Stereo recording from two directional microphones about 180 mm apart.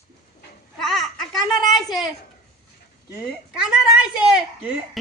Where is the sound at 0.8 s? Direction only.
Centre (ahead or behind).